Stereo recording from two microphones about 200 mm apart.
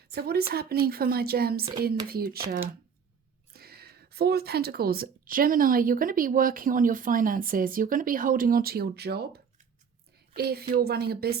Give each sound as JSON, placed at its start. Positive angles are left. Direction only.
{"t": 0.1, "sound": "speech", "side_deg": -50}
{"t": 3.5, "sound": "speech", "side_deg": -50}
{"t": 10.5, "sound": "speech", "side_deg": -50}